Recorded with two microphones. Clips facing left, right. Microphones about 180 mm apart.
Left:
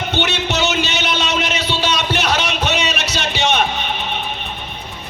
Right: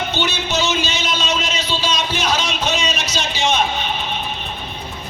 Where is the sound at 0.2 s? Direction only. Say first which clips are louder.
Left 3 dB; 65° left (ahead or behind).